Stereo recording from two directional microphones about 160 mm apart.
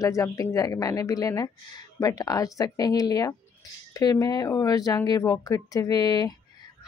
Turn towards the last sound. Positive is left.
turn(degrees=25)  # may be behind; listen again after turning